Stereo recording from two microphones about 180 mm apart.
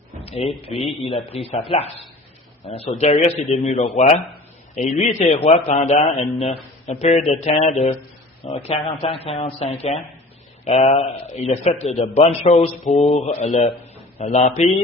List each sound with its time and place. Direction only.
0.3 s speech: 35° left (ahead or behind)
0.7 s speech: centre (ahead or behind)
1.0 s a man's voice: 30° left (ahead or behind)